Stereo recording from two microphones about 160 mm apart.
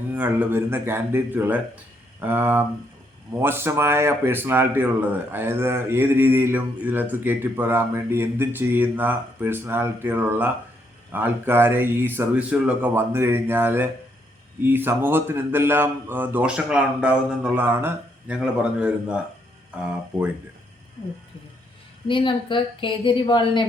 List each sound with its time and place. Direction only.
0.1 s speech: 10° right (ahead or behind)
22.0 s a woman's voice: 30° left (ahead or behind)